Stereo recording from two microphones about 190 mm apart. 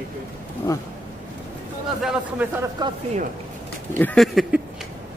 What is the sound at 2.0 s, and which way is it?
Speech, 5° right (ahead or behind).